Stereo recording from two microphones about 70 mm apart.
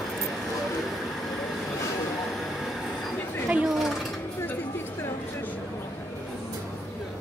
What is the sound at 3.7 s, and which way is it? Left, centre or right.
Mechanisms, centre.